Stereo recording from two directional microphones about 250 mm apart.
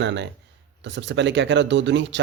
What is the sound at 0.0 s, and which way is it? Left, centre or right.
Speech, right.